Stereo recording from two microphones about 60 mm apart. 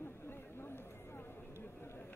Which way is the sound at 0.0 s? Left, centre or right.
Left.